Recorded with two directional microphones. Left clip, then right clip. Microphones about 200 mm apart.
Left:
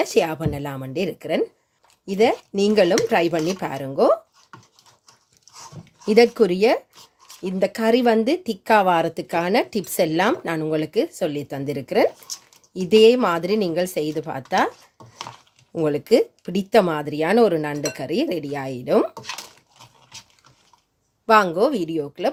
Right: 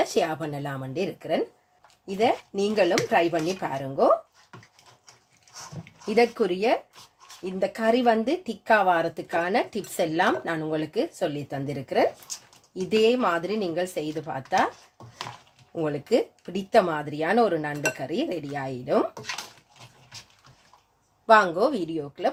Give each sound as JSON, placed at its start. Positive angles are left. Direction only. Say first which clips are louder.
{"t": 0.0, "sound": "speech", "louder": "left 4 dB", "side_deg": 40}
{"t": 6.1, "sound": "speech", "louder": "left 7 dB", "side_deg": 50}
{"t": 15.7, "sound": "speech", "louder": "left 6 dB", "side_deg": 45}
{"t": 21.2, "sound": "speech", "louder": "left 2 dB", "side_deg": 35}